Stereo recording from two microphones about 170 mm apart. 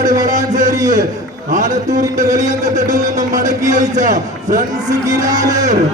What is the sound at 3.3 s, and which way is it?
A man's voice, 45° right (ahead or behind).